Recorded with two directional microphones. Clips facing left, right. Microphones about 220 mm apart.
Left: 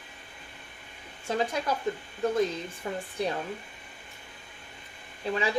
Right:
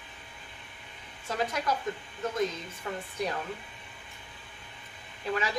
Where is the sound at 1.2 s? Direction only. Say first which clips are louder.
Left 2 dB; 30° left (ahead or behind).